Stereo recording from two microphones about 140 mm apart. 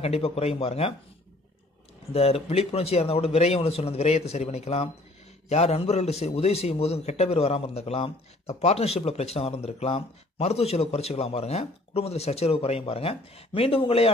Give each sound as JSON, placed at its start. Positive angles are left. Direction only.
{"t": 0.0, "sound": "a man's voice", "side_deg": 45}
{"t": 2.1, "sound": "a man's voice", "side_deg": 45}